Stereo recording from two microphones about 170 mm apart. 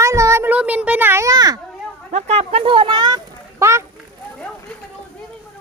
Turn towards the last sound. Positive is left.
turn(degrees=-15)  # may be behind; listen again after turning